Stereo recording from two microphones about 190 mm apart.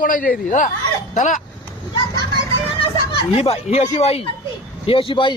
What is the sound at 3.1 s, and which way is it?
Speech, 30° left (ahead or behind).